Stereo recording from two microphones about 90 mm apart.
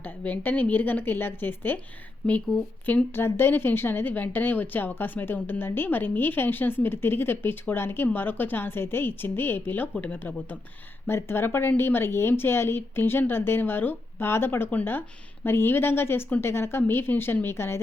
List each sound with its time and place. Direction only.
0.0 s speech: 20° left (ahead or behind)